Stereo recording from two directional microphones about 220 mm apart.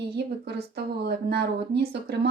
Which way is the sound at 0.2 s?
45° right (ahead or behind).